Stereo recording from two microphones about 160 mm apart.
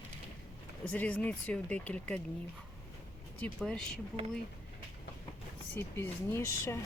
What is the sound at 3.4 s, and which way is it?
Speech, 5° left (ahead or behind).